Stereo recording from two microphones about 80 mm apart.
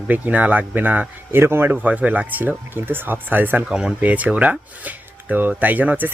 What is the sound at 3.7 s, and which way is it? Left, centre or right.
Speech, centre.